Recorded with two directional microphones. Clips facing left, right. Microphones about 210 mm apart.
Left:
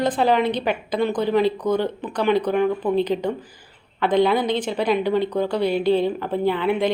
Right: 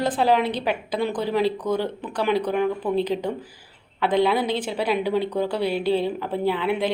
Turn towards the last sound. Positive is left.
turn(degrees=-5)  # may be behind; listen again after turning